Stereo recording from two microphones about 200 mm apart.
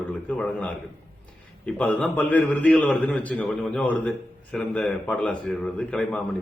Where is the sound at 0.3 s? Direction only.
5° left (ahead or behind).